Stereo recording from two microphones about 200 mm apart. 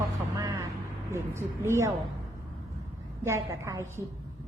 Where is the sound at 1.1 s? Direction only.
15° right (ahead or behind).